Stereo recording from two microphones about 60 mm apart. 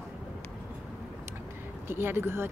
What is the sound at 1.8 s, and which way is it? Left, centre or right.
Speech, right.